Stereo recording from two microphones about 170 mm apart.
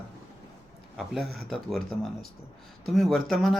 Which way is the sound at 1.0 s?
Centre (ahead or behind).